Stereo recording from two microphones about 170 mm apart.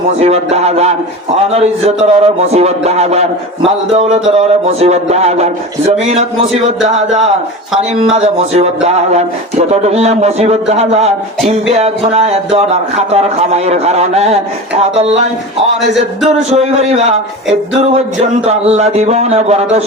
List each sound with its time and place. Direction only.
0.2 s a man's voice: 40° right (ahead or behind)
6.8 s a man's voice: 40° right (ahead or behind)
16.5 s a man's voice: 40° right (ahead or behind)